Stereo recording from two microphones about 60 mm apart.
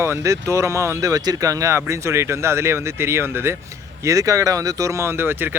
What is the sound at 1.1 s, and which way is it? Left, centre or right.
Speech, right.